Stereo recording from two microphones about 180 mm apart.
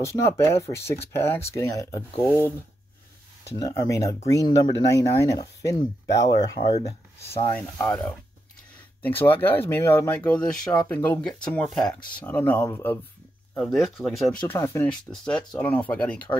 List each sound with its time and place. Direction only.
0.0 s speech: 15° left (ahead or behind)
3.5 s speech: 20° left (ahead or behind); by 14.4 s centre (ahead or behind)
14.5 s speech: 15° left (ahead or behind)